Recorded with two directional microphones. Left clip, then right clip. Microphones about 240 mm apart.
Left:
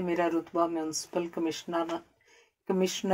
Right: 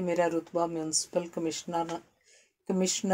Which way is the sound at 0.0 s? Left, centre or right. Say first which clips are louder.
Right 1 dB; right.